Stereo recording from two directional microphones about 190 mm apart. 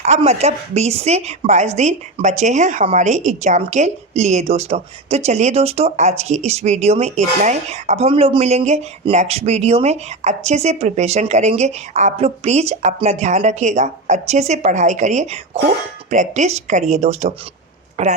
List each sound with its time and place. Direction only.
0.0 s a woman's voice: 35° right (ahead or behind)